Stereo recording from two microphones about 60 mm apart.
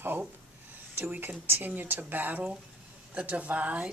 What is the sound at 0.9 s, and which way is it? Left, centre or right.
Speech, right.